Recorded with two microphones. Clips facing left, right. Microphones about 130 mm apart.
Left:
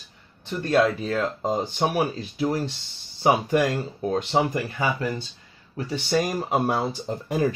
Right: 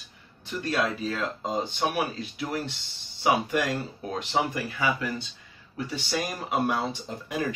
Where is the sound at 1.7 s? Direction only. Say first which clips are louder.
Left 4 dB; 35° left (ahead or behind).